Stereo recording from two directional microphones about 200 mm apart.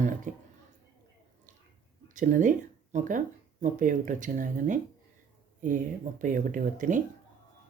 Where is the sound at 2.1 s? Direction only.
40° right (ahead or behind).